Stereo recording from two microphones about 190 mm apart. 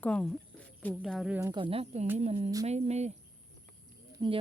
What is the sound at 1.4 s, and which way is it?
Speech, 25° right (ahead or behind).